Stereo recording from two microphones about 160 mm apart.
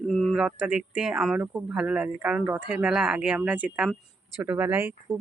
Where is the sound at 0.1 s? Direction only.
Centre (ahead or behind).